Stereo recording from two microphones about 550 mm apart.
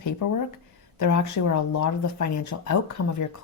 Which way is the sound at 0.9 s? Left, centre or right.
Left.